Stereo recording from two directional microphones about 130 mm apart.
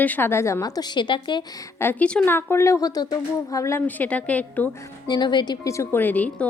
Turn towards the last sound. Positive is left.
turn(degrees=10)  # may be behind; listen again after turning